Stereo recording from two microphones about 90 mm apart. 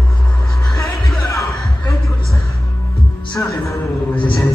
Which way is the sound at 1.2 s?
35° left (ahead or behind).